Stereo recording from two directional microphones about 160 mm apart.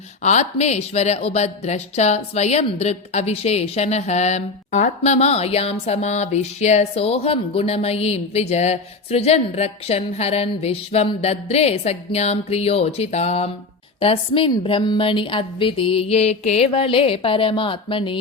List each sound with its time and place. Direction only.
0.2 s speech: 45° left (ahead or behind)